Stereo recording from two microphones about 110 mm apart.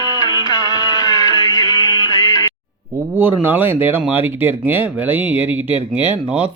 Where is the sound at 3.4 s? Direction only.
20° right (ahead or behind).